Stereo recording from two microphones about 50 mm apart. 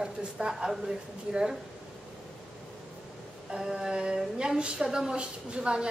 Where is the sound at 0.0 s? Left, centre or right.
Centre.